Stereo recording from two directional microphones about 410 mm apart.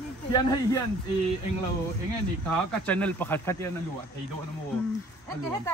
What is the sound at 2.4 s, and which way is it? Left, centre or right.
Speech, centre.